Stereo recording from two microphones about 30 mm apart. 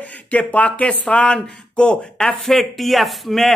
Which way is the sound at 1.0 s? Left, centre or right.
Left.